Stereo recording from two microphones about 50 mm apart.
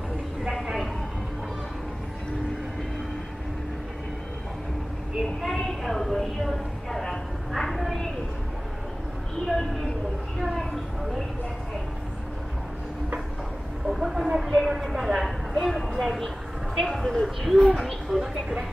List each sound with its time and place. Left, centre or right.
5.4 s a sound: centre
9.5 s a woman's voice: centre
13.8 s a woman's voice: centre
18.2 s speech: centre